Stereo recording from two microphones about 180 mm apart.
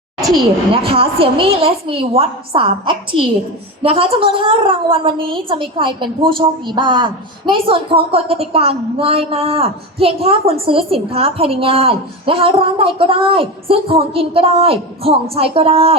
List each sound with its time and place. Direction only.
0.3 s a woman's voice: 30° right (ahead or behind)